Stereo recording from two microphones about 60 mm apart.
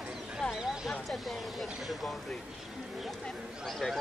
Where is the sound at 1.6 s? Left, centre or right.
Centre.